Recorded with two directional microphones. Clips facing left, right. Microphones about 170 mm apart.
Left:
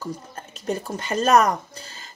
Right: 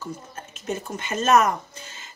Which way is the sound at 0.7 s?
35° left (ahead or behind).